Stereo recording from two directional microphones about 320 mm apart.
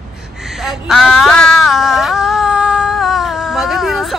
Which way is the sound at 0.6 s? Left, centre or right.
Centre.